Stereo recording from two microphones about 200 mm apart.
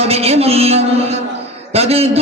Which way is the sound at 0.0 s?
30° right (ahead or behind).